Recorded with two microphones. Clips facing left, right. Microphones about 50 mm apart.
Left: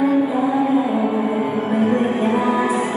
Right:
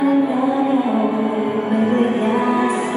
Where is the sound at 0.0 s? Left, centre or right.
Right.